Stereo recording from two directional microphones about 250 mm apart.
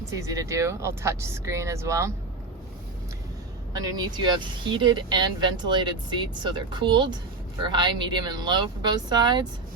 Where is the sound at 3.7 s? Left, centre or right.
Centre.